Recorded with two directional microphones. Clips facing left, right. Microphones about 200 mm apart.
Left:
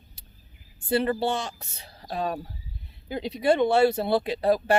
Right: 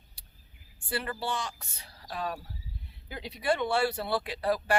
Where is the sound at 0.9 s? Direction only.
25° left (ahead or behind).